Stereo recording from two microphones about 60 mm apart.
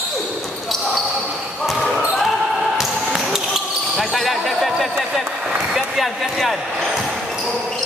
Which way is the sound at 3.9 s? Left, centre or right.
Centre.